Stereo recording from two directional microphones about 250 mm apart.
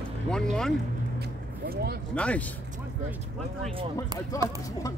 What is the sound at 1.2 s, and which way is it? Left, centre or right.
Vehicle, right.